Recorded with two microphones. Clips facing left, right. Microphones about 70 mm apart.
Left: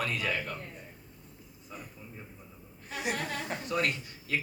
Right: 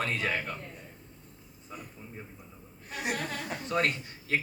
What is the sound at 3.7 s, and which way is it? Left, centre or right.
Speech, right.